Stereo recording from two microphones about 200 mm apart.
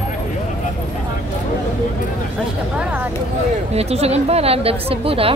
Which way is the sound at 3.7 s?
30° right (ahead or behind).